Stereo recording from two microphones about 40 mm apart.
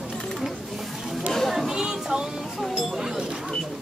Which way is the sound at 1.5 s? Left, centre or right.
Centre.